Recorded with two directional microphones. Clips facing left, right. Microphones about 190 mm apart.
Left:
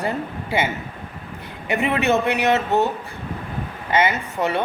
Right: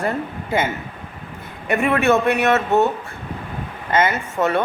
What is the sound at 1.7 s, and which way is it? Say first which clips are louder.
Speech: right 3 dB; 20° left (ahead or behind).